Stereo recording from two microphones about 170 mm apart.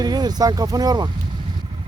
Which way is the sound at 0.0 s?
25° right (ahead or behind).